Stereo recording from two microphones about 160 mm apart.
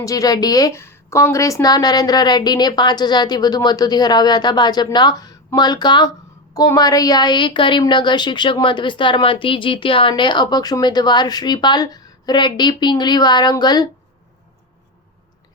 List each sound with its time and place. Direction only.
0.0 s a woman's voice: 20° left (ahead or behind)